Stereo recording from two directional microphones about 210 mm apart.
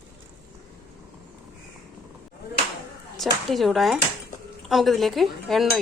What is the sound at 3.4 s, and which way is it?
Dishes, centre (ahead or behind).